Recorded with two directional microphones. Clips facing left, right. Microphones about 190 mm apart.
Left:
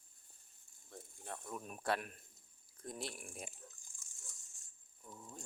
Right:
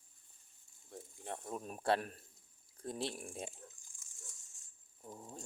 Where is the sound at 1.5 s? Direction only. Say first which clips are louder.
Right 4 dB; 35° right (ahead or behind).